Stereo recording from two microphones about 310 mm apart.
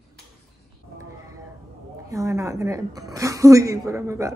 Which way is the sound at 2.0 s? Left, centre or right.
Centre.